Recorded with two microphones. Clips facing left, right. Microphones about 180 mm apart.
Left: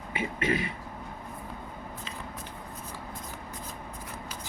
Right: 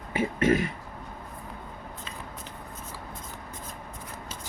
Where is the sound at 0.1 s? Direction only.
45° right (ahead or behind).